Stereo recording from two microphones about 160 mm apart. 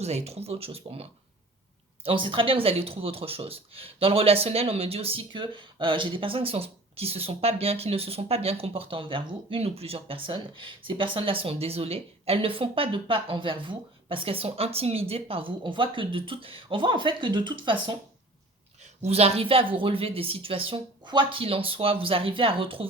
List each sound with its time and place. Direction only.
0.0 s speech: 40° right (ahead or behind)
2.0 s speech: 30° right (ahead or behind)
19.0 s speech: 40° right (ahead or behind)